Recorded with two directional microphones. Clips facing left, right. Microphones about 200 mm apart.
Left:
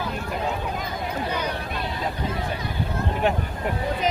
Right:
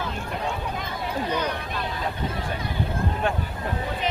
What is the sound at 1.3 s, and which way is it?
Vehicle, 10° left (ahead or behind).